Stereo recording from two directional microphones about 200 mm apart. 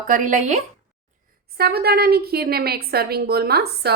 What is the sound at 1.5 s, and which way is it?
A woman's voice, 50° right (ahead or behind).